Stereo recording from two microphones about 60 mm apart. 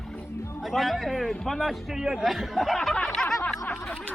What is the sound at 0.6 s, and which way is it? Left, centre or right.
Speech, centre.